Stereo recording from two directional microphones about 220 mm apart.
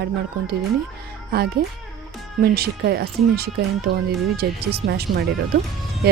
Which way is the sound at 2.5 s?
45° right (ahead or behind).